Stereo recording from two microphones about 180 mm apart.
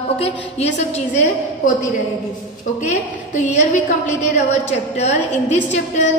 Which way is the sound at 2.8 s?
45° left (ahead or behind).